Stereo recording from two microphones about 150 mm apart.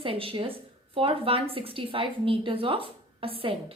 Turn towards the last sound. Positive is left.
turn(degrees=-35)  # may be behind; listen again after turning